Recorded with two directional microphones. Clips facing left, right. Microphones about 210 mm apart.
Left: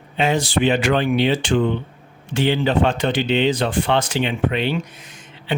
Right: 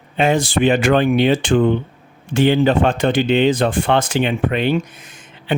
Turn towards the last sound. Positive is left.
turn(degrees=-50)  # may be behind; listen again after turning